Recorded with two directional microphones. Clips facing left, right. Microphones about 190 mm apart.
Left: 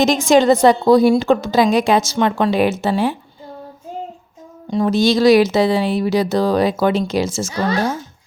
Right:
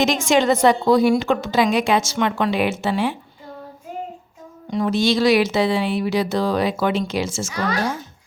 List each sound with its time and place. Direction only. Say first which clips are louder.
0.0 s speech: left 5 dB; 35° left (ahead or behind)
4.7 s speech: left 4 dB; 35° left (ahead or behind)